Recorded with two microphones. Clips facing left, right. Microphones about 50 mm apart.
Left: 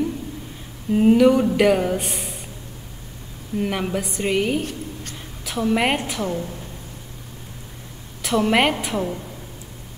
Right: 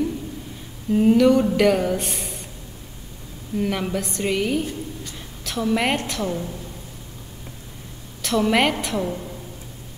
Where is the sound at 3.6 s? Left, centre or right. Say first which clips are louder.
Even; centre.